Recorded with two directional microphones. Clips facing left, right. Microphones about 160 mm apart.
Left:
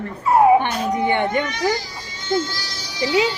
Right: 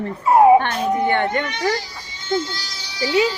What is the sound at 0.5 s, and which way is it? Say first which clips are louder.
A child's voice: right 2 dB; 15° left (ahead or behind).